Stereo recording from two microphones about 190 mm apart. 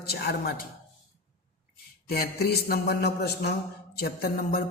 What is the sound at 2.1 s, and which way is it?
A man's voice, 55° left (ahead or behind).